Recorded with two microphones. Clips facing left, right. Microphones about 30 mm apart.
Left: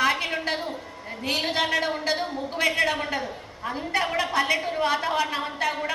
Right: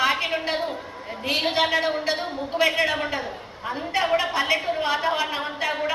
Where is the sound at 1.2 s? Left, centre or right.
Right.